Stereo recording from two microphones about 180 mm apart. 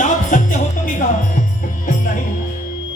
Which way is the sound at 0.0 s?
45° left (ahead or behind).